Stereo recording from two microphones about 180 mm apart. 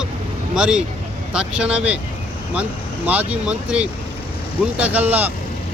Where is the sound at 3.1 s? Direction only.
10° right (ahead or behind).